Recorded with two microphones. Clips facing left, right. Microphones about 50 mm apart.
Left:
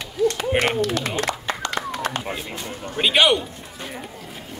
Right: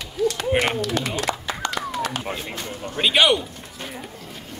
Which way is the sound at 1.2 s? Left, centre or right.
Left.